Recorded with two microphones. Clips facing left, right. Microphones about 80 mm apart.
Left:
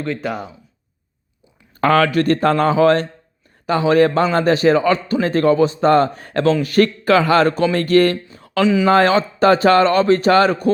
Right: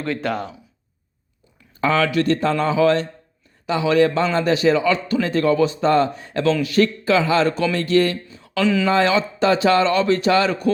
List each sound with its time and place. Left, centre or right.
0.0 s speech: centre
1.8 s speech: left
8.6 s speech: centre
8.9 s speech: left